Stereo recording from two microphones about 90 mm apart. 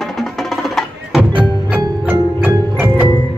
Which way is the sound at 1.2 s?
15° right (ahead or behind).